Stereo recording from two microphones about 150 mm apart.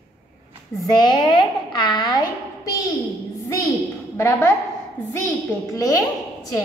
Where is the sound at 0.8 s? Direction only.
30° left (ahead or behind).